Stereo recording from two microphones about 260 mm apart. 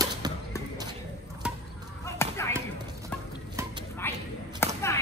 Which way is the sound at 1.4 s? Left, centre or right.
Centre.